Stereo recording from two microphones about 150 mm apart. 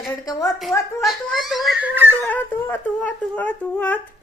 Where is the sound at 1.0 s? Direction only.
Centre (ahead or behind); by 2.3 s 15° right (ahead or behind).